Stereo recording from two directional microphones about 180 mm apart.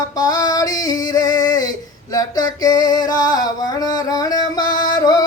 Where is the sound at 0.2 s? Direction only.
20° left (ahead or behind).